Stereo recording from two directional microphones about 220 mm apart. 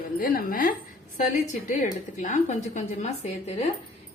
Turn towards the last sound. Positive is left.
turn(degrees=30)  # may be behind; listen again after turning